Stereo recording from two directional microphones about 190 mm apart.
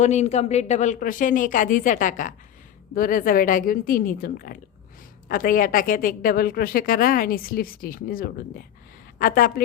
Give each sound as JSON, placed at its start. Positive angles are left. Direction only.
{"t": 0.0, "sound": "speech", "side_deg": 35}